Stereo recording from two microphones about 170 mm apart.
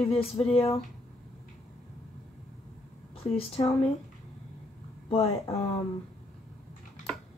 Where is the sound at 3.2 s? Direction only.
35° left (ahead or behind).